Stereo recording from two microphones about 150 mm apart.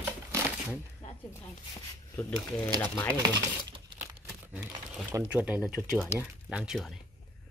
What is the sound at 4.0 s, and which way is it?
Speech, 15° right (ahead or behind).